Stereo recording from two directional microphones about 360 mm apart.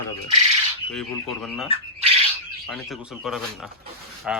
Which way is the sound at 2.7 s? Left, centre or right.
Centre.